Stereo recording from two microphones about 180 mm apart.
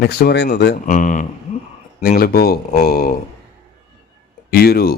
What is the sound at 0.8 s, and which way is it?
Speech, 45° left (ahead or behind).